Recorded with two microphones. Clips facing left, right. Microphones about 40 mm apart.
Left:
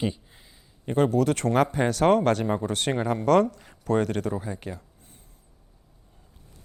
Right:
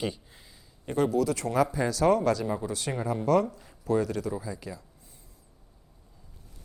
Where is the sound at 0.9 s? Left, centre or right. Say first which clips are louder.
Left 3 dB; left.